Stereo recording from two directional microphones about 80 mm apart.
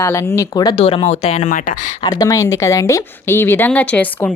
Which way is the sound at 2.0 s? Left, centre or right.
Left.